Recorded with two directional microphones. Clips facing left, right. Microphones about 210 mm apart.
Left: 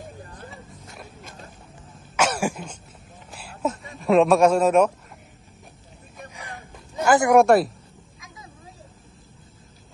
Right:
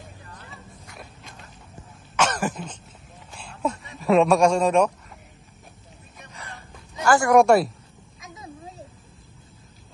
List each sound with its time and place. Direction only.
2.1 s throat clearing: 10° left (ahead or behind)
3.3 s speech: 5° left (ahead or behind)
6.3 s a sound: 15° left (ahead or behind)
7.3 s a man's voice: centre (ahead or behind)